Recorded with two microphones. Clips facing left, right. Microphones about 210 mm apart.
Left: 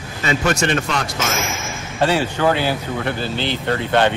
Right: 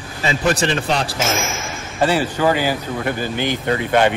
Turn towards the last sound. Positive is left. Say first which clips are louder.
# right 1 dB
turn(degrees=-10)  # may be behind; listen again after turning